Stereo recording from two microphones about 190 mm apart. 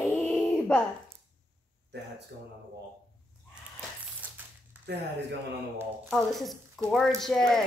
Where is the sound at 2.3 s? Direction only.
60° right (ahead or behind).